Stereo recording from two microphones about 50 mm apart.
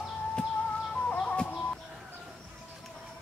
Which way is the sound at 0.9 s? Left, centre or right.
Left.